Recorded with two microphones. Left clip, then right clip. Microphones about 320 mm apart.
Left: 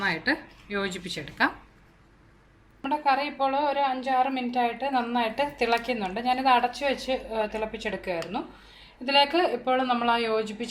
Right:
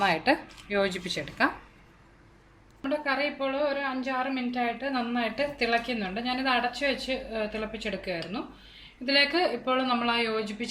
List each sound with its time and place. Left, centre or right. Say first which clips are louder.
0.0 s speech: right 2 dB; centre
2.8 s a woman's voice: left 3 dB; centre